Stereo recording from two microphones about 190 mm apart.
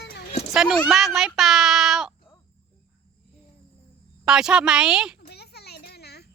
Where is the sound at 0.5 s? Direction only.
Centre (ahead or behind).